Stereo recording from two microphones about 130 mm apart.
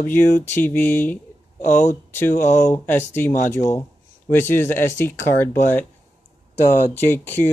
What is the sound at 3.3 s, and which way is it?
Speech, 75° left (ahead or behind).